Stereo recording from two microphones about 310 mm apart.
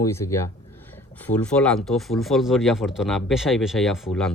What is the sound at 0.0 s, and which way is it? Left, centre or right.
Speech, centre.